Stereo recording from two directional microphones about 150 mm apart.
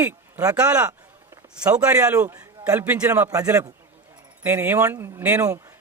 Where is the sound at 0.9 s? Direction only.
20° right (ahead or behind).